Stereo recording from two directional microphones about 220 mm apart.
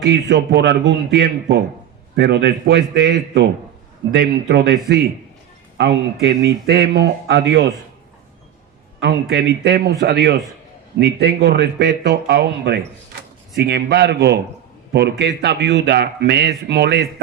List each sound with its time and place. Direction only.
0.1 s speech: 50° right (ahead or behind)
9.0 s speech: 50° right (ahead or behind)